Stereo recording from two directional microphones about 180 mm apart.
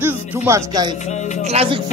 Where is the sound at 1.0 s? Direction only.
40° left (ahead or behind).